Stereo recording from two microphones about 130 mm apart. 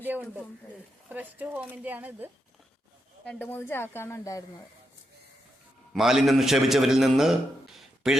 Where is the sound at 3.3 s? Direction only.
15° left (ahead or behind).